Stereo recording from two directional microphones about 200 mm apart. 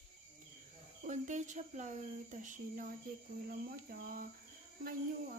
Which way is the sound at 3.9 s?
45° right (ahead or behind).